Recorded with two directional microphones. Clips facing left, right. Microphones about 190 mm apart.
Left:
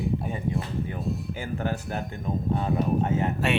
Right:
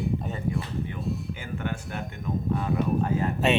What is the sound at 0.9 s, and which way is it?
Speech, 40° left (ahead or behind).